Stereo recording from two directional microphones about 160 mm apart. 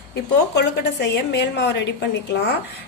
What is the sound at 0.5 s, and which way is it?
A woman's voice, 90° left.